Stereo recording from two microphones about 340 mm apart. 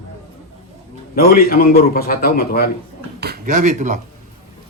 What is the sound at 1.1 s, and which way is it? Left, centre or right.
A man's voice, left.